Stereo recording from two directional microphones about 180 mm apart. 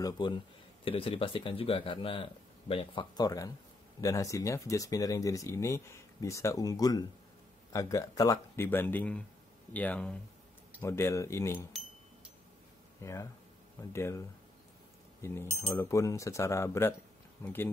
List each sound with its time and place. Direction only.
0.0 s speech: 25° left (ahead or behind)
13.0 s speech: 15° left (ahead or behind)
15.2 s speech: 15° left (ahead or behind)